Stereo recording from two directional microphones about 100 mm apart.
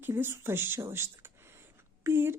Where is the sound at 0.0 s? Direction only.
20° right (ahead or behind).